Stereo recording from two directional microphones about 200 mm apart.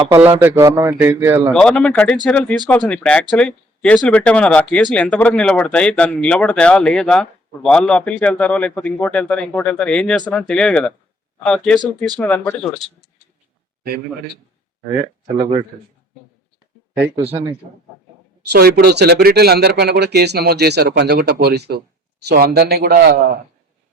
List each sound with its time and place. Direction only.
0.1 s a man's voice: 10° right (ahead or behind)
1.5 s speech: 5° left (ahead or behind)
15.4 s speech: 30° right (ahead or behind)
17.2 s a man's voice: 10° right (ahead or behind)
18.5 s speech: 55° right (ahead or behind)